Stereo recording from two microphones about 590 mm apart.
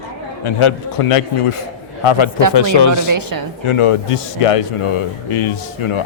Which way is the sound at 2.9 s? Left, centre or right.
Right.